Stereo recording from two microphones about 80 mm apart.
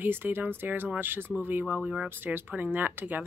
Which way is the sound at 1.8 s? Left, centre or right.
Centre.